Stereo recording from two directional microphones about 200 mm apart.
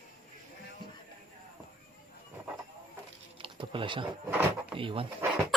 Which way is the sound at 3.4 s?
25° right (ahead or behind).